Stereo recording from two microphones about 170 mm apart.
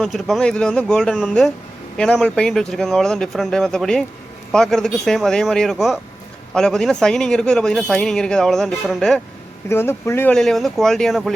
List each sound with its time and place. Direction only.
0.0 s a man's voice: centre (ahead or behind)
9.6 s a man's voice: 15° left (ahead or behind)